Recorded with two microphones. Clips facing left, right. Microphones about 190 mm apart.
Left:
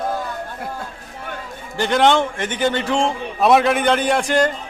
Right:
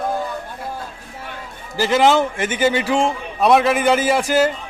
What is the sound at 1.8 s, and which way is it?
A man's voice, centre (ahead or behind).